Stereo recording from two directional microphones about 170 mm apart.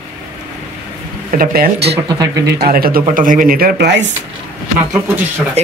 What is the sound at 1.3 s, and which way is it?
Speech, 60° right (ahead or behind).